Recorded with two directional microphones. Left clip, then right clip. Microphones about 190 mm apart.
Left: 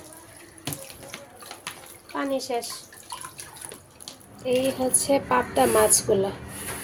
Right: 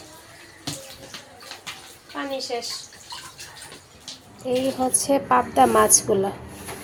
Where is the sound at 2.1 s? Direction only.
45° left (ahead or behind).